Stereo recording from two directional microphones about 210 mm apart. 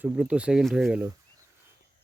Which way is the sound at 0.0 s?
5° right (ahead or behind).